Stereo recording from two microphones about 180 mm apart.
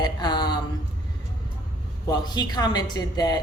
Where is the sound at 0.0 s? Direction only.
25° left (ahead or behind).